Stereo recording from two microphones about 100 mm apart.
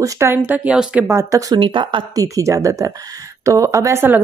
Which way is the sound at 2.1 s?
35° right (ahead or behind).